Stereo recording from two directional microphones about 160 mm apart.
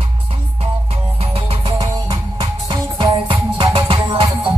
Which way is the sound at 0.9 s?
40° right (ahead or behind).